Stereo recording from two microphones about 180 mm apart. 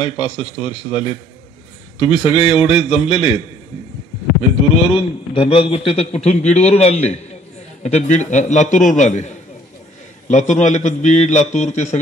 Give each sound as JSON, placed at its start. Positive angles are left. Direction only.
{"t": 0.0, "sound": "a man's voice", "side_deg": 30}
{"t": 4.9, "sound": "a man's voice", "side_deg": 30}